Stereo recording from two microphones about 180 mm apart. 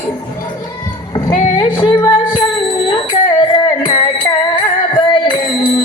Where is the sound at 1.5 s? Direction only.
25° left (ahead or behind).